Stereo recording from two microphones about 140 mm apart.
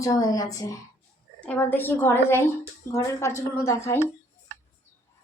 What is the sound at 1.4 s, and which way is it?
A woman's voice, 10° left (ahead or behind).